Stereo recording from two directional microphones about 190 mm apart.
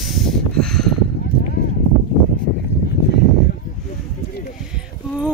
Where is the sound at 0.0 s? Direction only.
Centre (ahead or behind).